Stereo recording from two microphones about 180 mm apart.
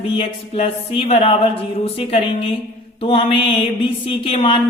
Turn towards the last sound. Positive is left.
turn(degrees=30)  # may be behind; listen again after turning